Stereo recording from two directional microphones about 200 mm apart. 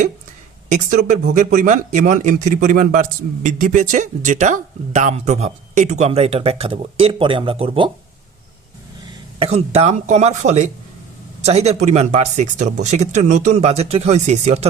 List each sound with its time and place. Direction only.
0.7 s a man's voice: 35° right (ahead or behind)
9.4 s a man's voice: 30° right (ahead or behind)